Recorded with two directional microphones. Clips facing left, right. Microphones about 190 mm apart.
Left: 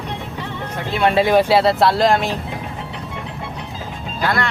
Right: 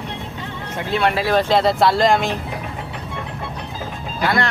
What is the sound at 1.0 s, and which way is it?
Speech, 20° left (ahead or behind).